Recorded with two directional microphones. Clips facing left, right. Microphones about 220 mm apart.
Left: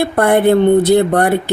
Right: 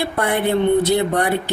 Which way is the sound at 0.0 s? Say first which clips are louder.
Left 8 dB; 50° left (ahead or behind).